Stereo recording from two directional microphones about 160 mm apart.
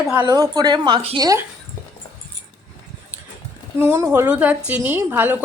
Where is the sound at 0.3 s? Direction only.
25° right (ahead or behind).